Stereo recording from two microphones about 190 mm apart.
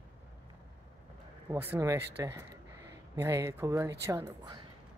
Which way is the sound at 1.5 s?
15° right (ahead or behind).